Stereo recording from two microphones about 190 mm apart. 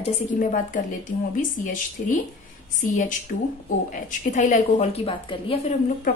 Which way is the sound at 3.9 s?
40° left (ahead or behind).